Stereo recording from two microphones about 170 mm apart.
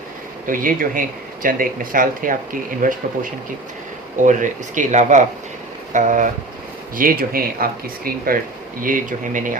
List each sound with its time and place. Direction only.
0.4 s speech: 55° right (ahead or behind)
4.2 s speech: 50° right (ahead or behind)